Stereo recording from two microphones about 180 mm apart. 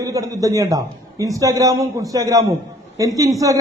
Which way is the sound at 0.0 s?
20° right (ahead or behind).